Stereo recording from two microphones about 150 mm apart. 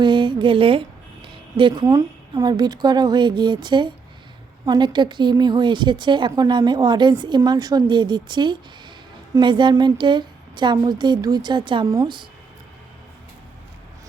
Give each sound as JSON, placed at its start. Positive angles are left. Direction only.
{"t": 0.0, "sound": "a woman's voice", "side_deg": -30}